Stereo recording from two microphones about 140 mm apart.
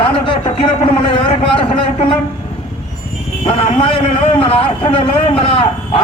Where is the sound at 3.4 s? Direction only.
40° left (ahead or behind).